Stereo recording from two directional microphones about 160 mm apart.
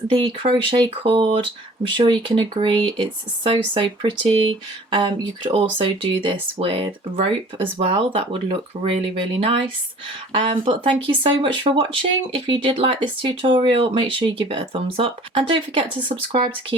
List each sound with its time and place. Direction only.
0.1 s speech: 30° right (ahead or behind)